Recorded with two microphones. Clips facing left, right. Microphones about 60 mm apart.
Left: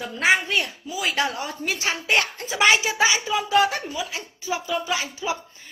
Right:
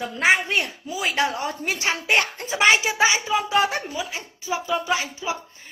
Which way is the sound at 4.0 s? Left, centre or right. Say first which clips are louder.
Even; centre.